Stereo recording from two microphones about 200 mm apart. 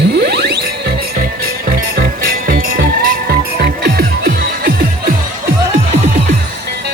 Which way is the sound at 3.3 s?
50° right (ahead or behind).